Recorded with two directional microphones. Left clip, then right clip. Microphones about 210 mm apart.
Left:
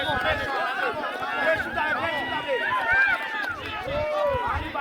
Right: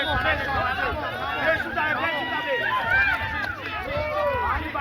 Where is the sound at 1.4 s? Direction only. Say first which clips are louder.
Even; 60° left (ahead or behind).